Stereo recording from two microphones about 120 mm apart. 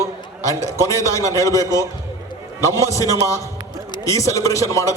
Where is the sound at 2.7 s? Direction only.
25° left (ahead or behind).